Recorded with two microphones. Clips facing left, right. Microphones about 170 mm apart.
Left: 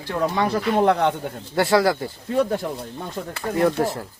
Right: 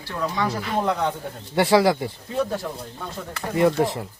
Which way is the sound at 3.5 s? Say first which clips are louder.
Right 1 dB; centre (ahead or behind).